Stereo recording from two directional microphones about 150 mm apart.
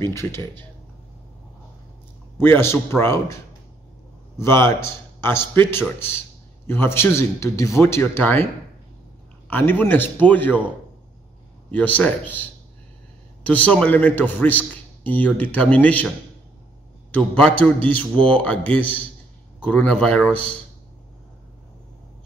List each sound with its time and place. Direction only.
0.0 s a man's voice: 15° left (ahead or behind)
2.3 s a man's voice: 15° left (ahead or behind)
4.4 s a man's voice: 15° left (ahead or behind)
9.5 s a man's voice: 10° left (ahead or behind)
11.7 s a man's voice: 10° left (ahead or behind)
17.1 s a man's voice: 10° left (ahead or behind)